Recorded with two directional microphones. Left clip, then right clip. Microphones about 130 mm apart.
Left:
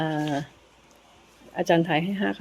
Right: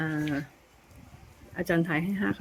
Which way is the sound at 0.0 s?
30° right (ahead or behind).